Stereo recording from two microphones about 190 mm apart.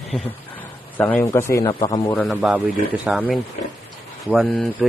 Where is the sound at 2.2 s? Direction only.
5° right (ahead or behind).